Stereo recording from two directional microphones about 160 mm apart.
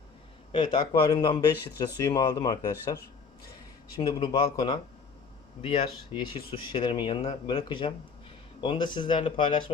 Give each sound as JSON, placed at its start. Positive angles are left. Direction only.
{"t": 0.5, "sound": "speech", "side_deg": 30}
{"t": 4.0, "sound": "speech", "side_deg": 30}